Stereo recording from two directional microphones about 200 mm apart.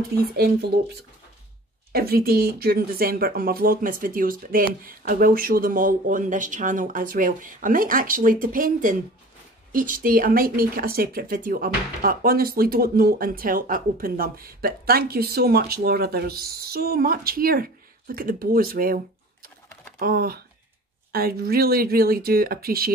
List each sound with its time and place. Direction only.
0.2 s speech: 50° right (ahead or behind)
1.9 s speech: 50° right (ahead or behind)
20.0 s speech: 50° right (ahead or behind)